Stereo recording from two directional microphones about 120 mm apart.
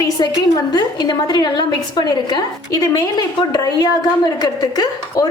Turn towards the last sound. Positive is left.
turn(degrees=35)  # may be behind; listen again after turning